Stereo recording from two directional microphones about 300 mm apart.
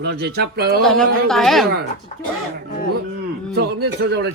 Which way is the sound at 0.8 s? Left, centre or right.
Centre.